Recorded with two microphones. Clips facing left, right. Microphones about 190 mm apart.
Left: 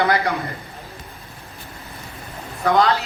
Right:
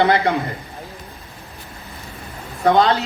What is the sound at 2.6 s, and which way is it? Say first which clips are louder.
Speech: right 2 dB; 25° right (ahead or behind).